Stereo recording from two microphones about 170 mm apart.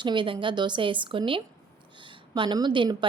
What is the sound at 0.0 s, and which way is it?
A woman's voice, 30° right (ahead or behind).